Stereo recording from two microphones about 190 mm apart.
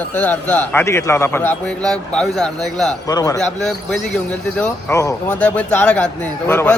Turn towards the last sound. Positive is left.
turn(degrees=10)  # may be behind; listen again after turning